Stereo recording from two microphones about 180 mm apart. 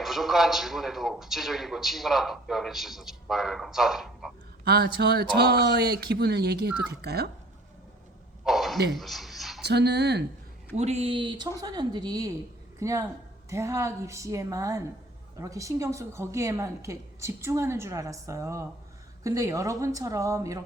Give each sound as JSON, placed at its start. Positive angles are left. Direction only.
{"t": 0.0, "sound": "a man's voice", "side_deg": 0}
{"t": 4.6, "sound": "speech", "side_deg": -65}
{"t": 8.4, "sound": "a man's voice", "side_deg": 0}
{"t": 8.9, "sound": "a sound", "side_deg": 0}
{"t": 9.6, "sound": "speech", "side_deg": -70}
{"t": 10.8, "sound": "a woman's voice", "side_deg": -35}